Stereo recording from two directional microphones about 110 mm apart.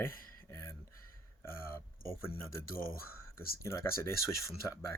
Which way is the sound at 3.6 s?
25° left (ahead or behind).